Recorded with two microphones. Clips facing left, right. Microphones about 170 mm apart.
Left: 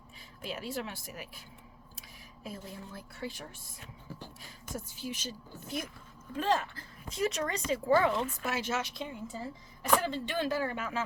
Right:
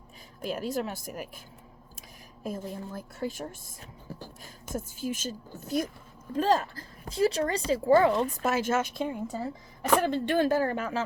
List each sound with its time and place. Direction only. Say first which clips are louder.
0.4 s speech: right 7 dB; 45° right (ahead or behind); by 9.5 s 65° right (ahead or behind)
10.0 s speech: right 8 dB; 55° right (ahead or behind)